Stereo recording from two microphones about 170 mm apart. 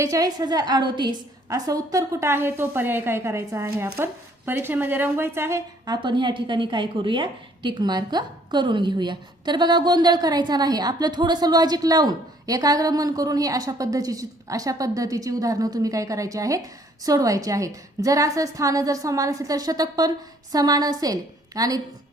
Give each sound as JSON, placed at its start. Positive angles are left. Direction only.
{"t": 0.0, "sound": "speech", "side_deg": -20}